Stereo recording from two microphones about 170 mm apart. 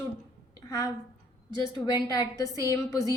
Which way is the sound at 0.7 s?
20° left (ahead or behind).